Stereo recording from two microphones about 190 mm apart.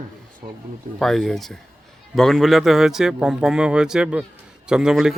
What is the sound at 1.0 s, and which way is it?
Speech, centre (ahead or behind).